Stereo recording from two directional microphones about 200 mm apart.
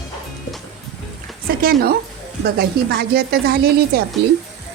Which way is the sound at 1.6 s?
50° right (ahead or behind).